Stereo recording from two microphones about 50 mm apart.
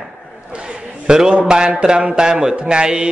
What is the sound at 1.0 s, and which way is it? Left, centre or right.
Speech, centre.